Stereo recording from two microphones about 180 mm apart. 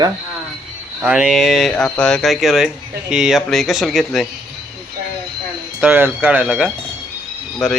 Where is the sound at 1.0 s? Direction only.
5° right (ahead or behind).